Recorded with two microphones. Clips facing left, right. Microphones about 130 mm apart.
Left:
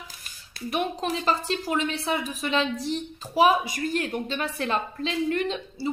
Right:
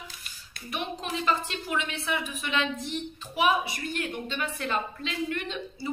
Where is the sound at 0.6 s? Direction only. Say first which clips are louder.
Left 7 dB; 35° left (ahead or behind).